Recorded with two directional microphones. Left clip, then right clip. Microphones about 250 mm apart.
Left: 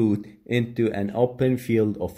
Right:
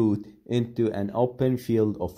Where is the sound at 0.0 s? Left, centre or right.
Centre.